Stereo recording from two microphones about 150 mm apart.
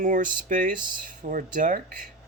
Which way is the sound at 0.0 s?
60° right (ahead or behind).